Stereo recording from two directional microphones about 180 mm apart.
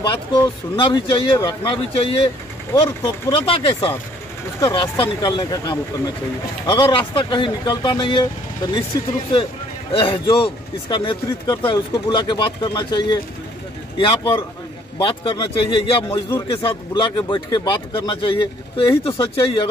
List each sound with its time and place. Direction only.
0.0 s speech: 25° left (ahead or behind)
9.9 s speech: 30° left (ahead or behind)
16.1 s music: 15° left (ahead or behind)
16.6 s speech: 25° left (ahead or behind)